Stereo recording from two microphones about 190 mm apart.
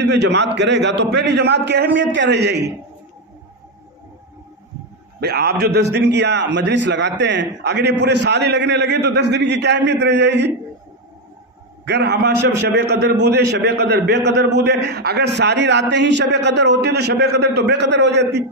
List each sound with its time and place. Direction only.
0.1 s a man's voice: 65° right (ahead or behind)
5.2 s a man's voice: 55° right (ahead or behind)
11.8 s a man's voice: 65° right (ahead or behind)